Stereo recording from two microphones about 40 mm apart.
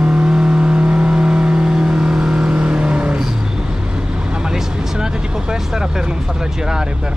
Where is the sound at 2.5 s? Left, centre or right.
Right.